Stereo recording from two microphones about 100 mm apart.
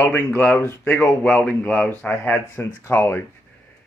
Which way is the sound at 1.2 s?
15° left (ahead or behind).